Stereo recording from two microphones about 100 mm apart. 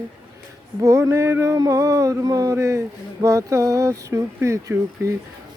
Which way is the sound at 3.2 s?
30° right (ahead or behind).